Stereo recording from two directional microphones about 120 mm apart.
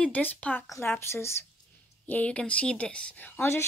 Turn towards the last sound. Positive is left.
turn(degrees=20)  # may be behind; listen again after turning